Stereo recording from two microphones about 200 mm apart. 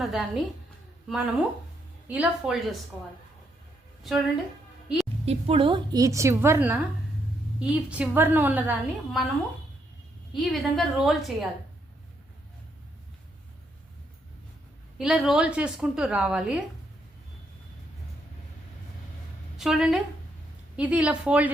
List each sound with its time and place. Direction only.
0.0 s a woman's voice: centre (ahead or behind)
5.2 s a woman's voice: 30° right (ahead or behind); by 9.2 s 10° right (ahead or behind)
10.3 s a woman's voice: centre (ahead or behind)
14.9 s a woman's voice: centre (ahead or behind)
19.5 s a woman's voice: centre (ahead or behind)